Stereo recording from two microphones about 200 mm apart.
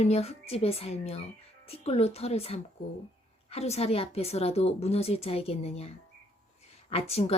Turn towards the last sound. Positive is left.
turn(degrees=30)  # may be behind; listen again after turning